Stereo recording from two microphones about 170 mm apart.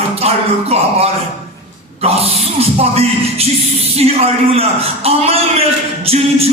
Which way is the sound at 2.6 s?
35° right (ahead or behind).